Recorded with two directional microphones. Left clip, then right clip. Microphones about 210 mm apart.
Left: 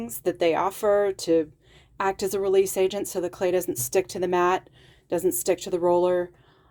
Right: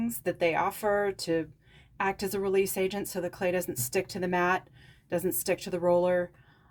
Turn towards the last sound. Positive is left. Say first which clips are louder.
# left 4 dB
turn(degrees=45)  # may be behind; listen again after turning